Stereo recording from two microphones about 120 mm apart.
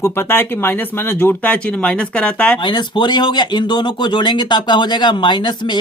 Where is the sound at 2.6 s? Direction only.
40° left (ahead or behind).